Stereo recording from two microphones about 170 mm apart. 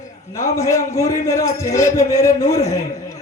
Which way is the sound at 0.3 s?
20° left (ahead or behind).